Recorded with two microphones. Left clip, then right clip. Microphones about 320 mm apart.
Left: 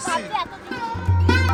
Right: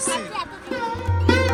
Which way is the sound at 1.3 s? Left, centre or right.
Centre.